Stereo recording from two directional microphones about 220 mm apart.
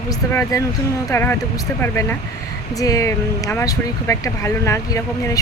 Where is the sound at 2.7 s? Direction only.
15° left (ahead or behind).